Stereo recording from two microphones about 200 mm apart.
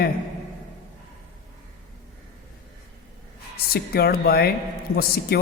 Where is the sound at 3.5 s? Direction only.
50° left (ahead or behind).